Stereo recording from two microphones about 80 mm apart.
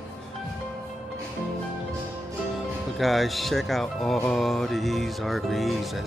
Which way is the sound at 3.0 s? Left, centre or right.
Centre.